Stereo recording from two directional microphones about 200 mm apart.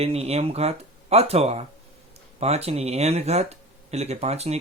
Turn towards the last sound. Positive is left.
turn(degrees=-30)  # may be behind; listen again after turning